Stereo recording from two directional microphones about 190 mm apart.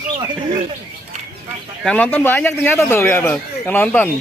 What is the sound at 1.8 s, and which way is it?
Speech, 5° left (ahead or behind).